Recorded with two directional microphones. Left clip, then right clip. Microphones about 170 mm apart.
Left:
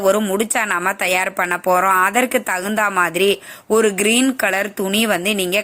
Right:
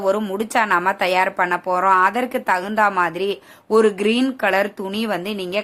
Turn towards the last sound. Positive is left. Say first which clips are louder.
# left 6 dB
turn(degrees=20)  # may be behind; listen again after turning